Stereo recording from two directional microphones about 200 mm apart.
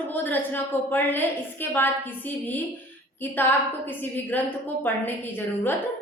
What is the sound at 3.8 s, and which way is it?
A woman's voice, 10° left (ahead or behind).